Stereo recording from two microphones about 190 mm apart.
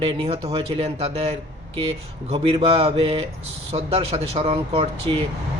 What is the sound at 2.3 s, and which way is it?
A man's voice, 30° right (ahead or behind).